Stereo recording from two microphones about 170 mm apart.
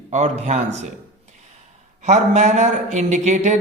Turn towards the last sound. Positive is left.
turn(degrees=-45)  # may be behind; listen again after turning